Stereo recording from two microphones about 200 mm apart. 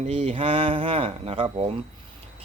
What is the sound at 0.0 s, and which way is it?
Speech, 30° right (ahead or behind).